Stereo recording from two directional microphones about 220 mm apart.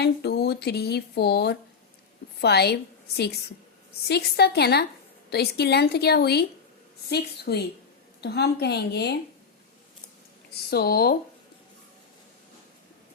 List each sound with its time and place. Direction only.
0.0 s speech: 45° left (ahead or behind)
10.5 s speech: 45° left (ahead or behind)